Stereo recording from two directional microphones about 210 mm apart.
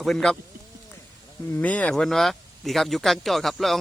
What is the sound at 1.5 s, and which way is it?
A man's voice, 5° left (ahead or behind).